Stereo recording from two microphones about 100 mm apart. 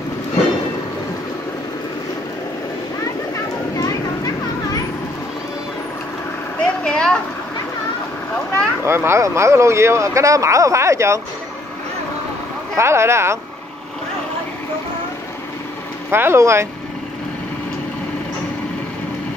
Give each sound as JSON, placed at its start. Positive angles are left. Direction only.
{"t": 6.6, "sound": "a sound", "side_deg": 10}
{"t": 8.8, "sound": "speech", "side_deg": -25}
{"t": 12.7, "sound": "speech", "side_deg": -25}
{"t": 16.1, "sound": "speech", "side_deg": -25}